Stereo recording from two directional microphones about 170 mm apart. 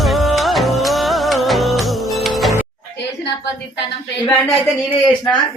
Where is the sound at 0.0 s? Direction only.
Centre (ahead or behind).